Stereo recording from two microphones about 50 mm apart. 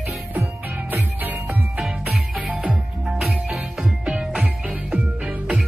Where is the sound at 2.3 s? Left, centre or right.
Right.